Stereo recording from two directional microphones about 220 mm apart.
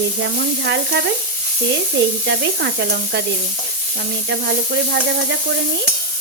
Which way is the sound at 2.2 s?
50° right (ahead or behind).